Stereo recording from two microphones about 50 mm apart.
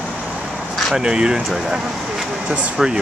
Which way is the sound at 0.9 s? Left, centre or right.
Centre.